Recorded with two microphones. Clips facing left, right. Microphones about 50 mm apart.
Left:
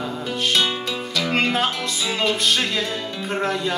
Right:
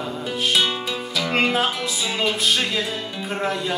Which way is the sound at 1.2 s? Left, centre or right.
Centre.